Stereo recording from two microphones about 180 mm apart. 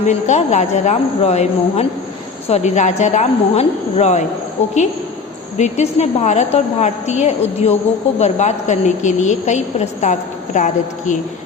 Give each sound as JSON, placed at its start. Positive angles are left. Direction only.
{"t": 0.1, "sound": "a woman's voice", "side_deg": 40}
{"t": 5.5, "sound": "a woman's voice", "side_deg": 40}